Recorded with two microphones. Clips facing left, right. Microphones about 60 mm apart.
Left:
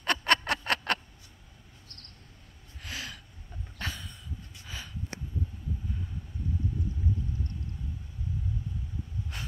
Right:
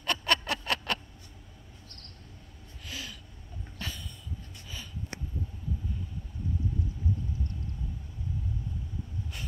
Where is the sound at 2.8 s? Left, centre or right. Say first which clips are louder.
Left 2 dB; left.